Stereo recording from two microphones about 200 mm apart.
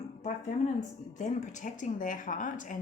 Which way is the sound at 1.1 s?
40° left (ahead or behind).